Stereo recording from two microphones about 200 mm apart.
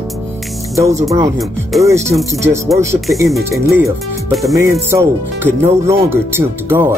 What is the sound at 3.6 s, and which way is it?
Speech, 15° right (ahead or behind).